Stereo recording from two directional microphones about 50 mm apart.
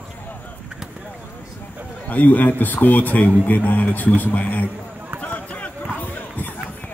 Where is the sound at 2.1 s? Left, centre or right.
Left.